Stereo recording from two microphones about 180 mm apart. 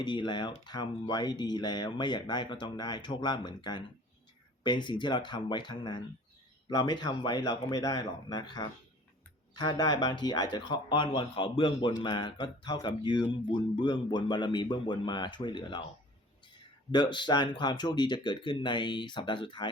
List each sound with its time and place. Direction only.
0.0 s speech: 25° left (ahead or behind)
16.9 s speech: 25° left (ahead or behind)